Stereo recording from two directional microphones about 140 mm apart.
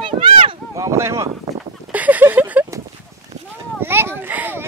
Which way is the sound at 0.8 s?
20° right (ahead or behind).